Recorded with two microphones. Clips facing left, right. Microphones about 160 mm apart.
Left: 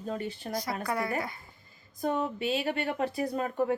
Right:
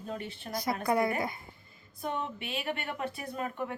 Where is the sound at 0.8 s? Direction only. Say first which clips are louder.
Right 6 dB; 15° right (ahead or behind).